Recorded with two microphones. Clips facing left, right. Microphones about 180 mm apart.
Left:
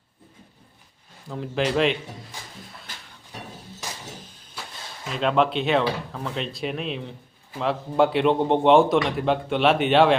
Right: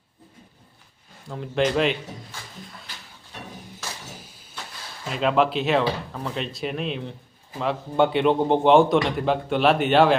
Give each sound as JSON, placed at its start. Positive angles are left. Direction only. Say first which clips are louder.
{"t": 1.3, "sound": "speech", "louder": "right 1 dB", "side_deg": 0}
{"t": 3.8, "sound": "a sound", "louder": "left 1 dB", "side_deg": 15}
{"t": 4.2, "sound": "vehicle", "louder": "left 1 dB", "side_deg": -10}
{"t": 5.1, "sound": "speech", "louder": "even", "side_deg": 0}